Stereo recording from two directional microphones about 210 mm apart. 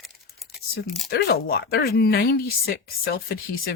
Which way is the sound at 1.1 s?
50° left (ahead or behind).